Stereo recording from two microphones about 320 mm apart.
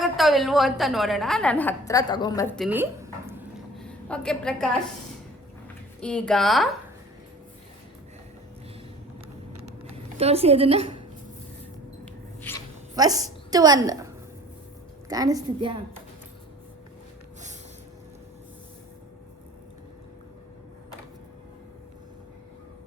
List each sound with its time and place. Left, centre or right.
0.0 s a woman's voice: centre
2.6 s a sound: centre
6.0 s a woman's voice: centre
9.9 s a woman's voice: centre
12.4 s dog: centre
13.0 s a woman's voice: centre
15.1 s a woman's voice: centre